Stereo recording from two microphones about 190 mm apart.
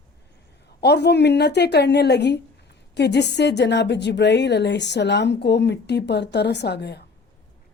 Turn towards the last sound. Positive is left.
turn(degrees=60)  # may be behind; listen again after turning